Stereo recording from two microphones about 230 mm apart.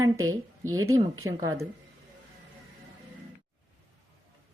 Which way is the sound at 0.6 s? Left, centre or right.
Centre.